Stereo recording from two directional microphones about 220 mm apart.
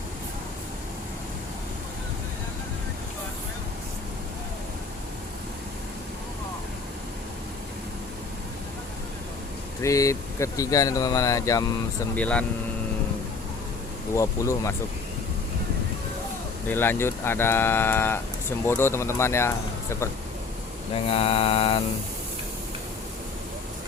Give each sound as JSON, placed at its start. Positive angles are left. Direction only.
{"t": 9.8, "sound": "speech", "side_deg": 15}
{"t": 14.2, "sound": "speech", "side_deg": 15}
{"t": 16.6, "sound": "speech", "side_deg": 10}
{"t": 20.9, "sound": "mantra", "side_deg": 25}